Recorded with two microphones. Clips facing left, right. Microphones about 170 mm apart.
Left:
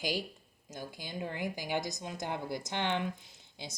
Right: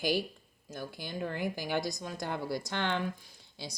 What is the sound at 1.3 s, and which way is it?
Speech, 20° left (ahead or behind).